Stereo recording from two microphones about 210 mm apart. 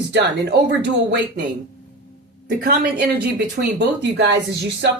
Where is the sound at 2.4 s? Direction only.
45° right (ahead or behind).